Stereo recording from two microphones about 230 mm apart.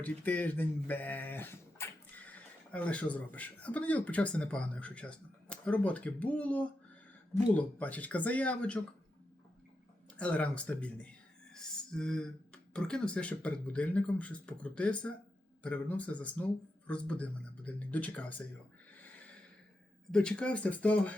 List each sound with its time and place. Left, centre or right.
0.0 s speech: centre
10.2 s speech: centre
18.9 s snort: centre
20.1 s speech: centre